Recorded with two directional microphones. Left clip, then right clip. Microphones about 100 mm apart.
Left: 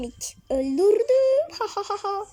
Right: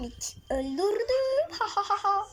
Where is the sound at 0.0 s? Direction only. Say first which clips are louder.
Left 4 dB; 15° left (ahead or behind).